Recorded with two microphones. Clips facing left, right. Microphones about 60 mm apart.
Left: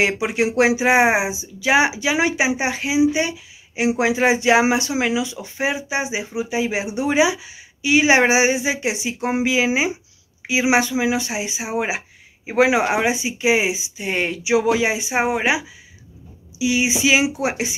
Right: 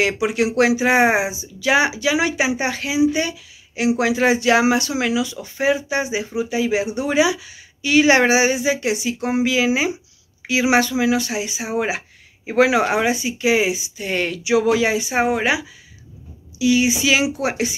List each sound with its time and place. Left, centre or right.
0.0 s speech: left